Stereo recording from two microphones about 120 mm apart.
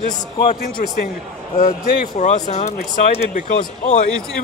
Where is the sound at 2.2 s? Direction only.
70° left (ahead or behind).